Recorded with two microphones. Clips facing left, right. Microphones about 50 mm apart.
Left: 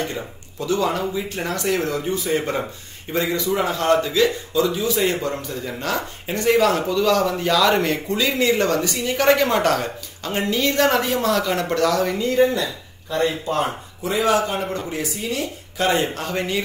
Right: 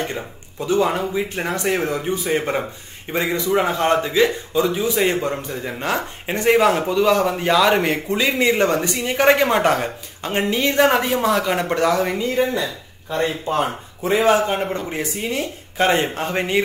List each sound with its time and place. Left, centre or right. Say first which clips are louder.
0.6 s a man's voice: right 2 dB; right
14.0 s a man's voice: right 3 dB; right